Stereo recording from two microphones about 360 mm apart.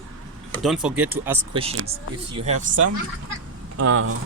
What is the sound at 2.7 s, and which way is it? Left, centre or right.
Speech, right.